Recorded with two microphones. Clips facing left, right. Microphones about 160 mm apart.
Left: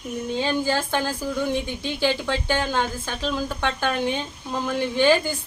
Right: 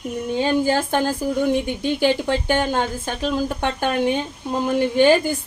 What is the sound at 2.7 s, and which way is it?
Speech, 50° right (ahead or behind).